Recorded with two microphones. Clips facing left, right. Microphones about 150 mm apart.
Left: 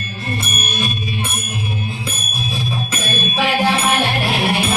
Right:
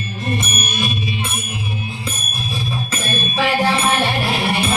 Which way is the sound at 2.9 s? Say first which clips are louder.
Left 1 dB; 5° left (ahead or behind).